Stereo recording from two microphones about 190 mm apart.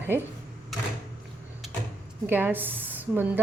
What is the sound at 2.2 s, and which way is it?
A woman's voice, 10° right (ahead or behind).